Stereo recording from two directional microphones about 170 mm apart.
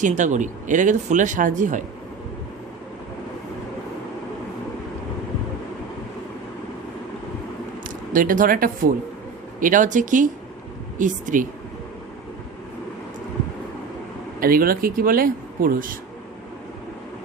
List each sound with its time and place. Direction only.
0.0 s speech: 45° right (ahead or behind)
7.9 s speech: 55° right (ahead or behind)
14.3 s speech: 60° right (ahead or behind)